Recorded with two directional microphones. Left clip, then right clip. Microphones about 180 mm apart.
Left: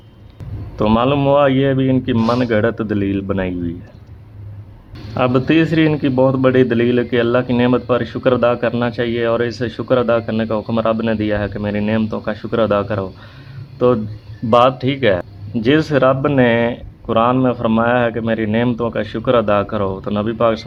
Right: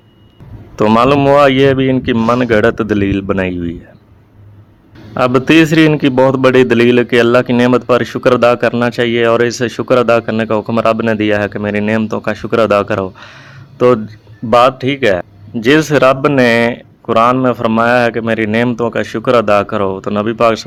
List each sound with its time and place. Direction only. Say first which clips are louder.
0.8 s a man's voice: right 6 dB; 30° right (ahead or behind)
5.1 s a man's voice: right 5 dB; 25° right (ahead or behind)